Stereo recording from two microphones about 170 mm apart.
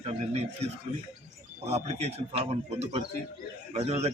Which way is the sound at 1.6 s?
40° right (ahead or behind).